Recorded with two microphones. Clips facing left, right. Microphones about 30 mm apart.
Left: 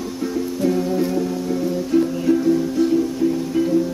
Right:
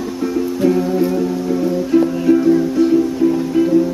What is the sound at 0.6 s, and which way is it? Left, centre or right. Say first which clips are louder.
Music: right 4 dB; centre.